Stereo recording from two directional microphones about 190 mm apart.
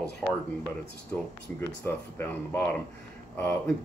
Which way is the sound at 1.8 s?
10° left (ahead or behind).